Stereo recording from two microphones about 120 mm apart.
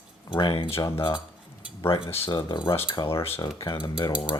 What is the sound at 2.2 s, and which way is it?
Speech, 40° left (ahead or behind).